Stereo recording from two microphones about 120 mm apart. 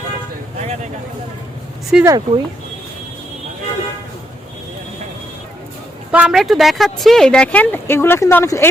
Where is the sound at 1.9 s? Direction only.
5° right (ahead or behind).